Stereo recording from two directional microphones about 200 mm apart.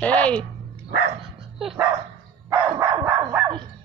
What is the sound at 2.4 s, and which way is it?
Dog, 15° right (ahead or behind).